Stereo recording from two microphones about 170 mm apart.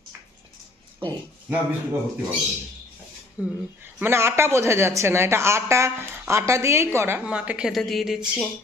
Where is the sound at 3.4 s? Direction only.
10° right (ahead or behind).